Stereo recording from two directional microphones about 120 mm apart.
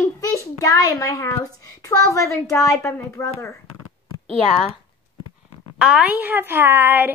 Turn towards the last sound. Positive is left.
turn(degrees=-15)  # may be behind; listen again after turning